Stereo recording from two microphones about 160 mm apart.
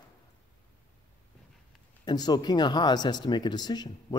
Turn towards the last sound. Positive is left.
turn(degrees=25)  # may be behind; listen again after turning